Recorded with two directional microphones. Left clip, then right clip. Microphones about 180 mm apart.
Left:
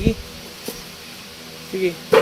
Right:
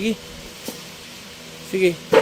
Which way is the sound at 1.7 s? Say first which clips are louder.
Right 3 dB; 50° right (ahead or behind).